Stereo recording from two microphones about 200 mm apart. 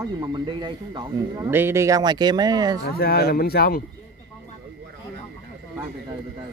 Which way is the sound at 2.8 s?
50° left (ahead or behind).